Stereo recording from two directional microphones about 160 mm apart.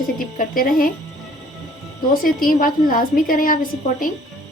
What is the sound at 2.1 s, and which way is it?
A woman's voice, 60° left (ahead or behind).